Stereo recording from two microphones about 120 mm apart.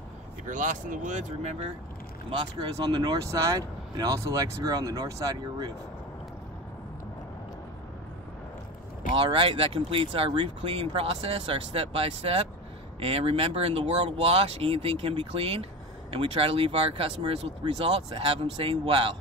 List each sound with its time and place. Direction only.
0.5 s speech: 90° right; by 1.7 s 65° right (ahead or behind)
2.2 s speech: 40° right (ahead or behind)
9.1 s speech: 50° right (ahead or behind)